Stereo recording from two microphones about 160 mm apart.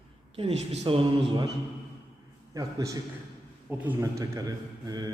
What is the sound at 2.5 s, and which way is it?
Mantra, 20° right (ahead or behind).